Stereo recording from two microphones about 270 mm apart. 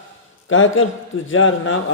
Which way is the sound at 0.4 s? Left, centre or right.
Left.